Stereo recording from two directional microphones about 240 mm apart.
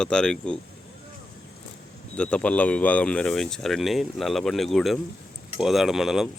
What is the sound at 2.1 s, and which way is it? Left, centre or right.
Speech, centre.